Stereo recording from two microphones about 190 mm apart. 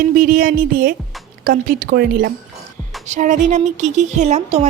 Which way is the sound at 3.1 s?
40° right (ahead or behind).